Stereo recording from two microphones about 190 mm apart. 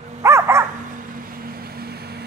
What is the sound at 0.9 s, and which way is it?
Vehicle, 45° right (ahead or behind).